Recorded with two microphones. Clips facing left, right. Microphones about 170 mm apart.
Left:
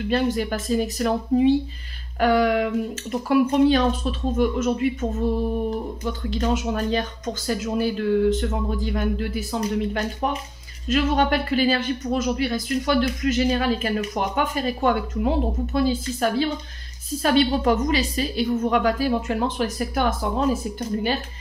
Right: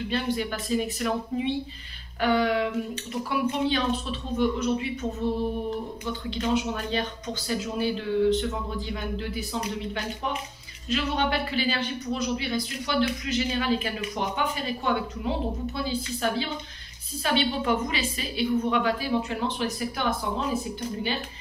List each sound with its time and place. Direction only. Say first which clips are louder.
0.1 s a woman's voice: left 7 dB; 45° left (ahead or behind)
6.3 s a woman's voice: left 3 dB; 45° left (ahead or behind)